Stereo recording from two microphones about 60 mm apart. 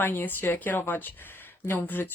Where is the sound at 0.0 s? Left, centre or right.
Left.